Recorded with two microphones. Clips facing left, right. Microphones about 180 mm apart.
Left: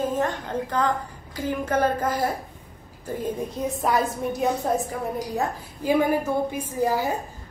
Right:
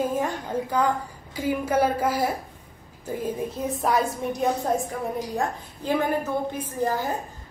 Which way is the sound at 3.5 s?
Centre (ahead or behind).